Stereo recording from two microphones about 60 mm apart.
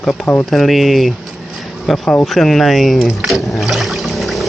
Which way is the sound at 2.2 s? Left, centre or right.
Centre.